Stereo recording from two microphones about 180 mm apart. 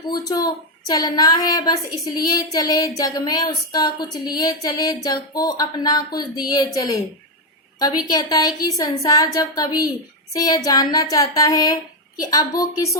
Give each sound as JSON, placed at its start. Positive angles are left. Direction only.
{"t": 0.1, "sound": "a woman's voice", "side_deg": 20}
{"t": 8.0, "sound": "a woman's voice", "side_deg": 20}